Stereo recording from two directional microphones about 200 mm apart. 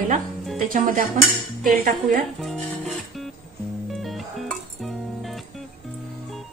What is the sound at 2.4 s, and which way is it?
Music, centre (ahead or behind).